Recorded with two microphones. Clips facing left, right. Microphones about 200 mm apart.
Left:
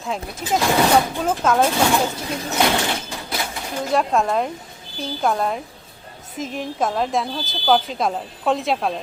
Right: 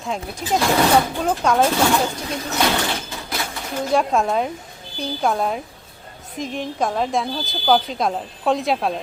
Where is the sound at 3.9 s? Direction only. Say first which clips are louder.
Even; centre (ahead or behind).